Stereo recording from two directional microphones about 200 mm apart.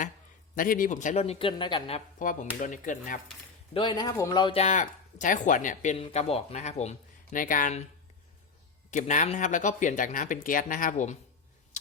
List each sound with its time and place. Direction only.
0.5 s speech: 45° left (ahead or behind); by 2.0 s 25° left (ahead or behind)
2.1 s speech: 40° left (ahead or behind)
3.8 s speech: 20° left (ahead or behind); by 7.9 s 40° left (ahead or behind)
8.9 s speech: 40° left (ahead or behind)